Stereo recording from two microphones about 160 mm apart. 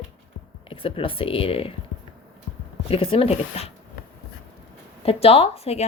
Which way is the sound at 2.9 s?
35° left (ahead or behind).